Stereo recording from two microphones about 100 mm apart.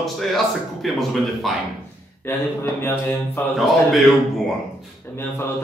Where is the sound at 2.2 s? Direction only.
25° left (ahead or behind).